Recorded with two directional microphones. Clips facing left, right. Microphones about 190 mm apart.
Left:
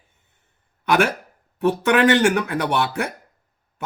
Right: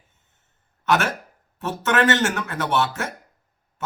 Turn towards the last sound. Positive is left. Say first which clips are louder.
# left 2 dB
turn(degrees=15)  # may be behind; listen again after turning